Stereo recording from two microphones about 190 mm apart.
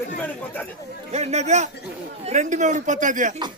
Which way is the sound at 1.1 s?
35° right (ahead or behind).